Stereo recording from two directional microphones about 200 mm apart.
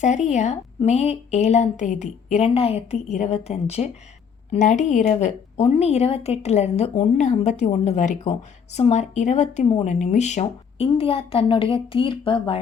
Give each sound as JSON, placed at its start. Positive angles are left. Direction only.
{"t": 0.3, "sound": "a woman's voice", "side_deg": 35}